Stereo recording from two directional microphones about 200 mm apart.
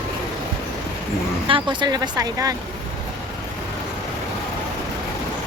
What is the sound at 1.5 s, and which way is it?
Speech, 25° right (ahead or behind).